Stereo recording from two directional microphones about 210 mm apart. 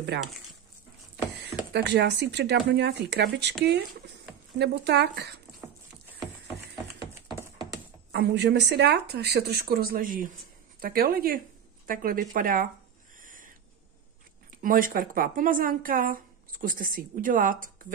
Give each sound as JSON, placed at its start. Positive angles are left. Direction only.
{"t": 1.7, "sound": "speech", "side_deg": -55}
{"t": 4.6, "sound": "speech", "side_deg": -55}
{"t": 8.1, "sound": "speech", "side_deg": -55}
{"t": 13.2, "sound": "a sound", "side_deg": -40}
{"t": 14.6, "sound": "speech", "side_deg": -40}